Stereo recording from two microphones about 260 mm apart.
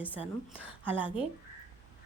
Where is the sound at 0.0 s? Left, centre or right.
Centre.